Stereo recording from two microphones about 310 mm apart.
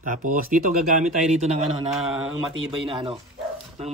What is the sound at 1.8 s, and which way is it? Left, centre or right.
Speech, centre.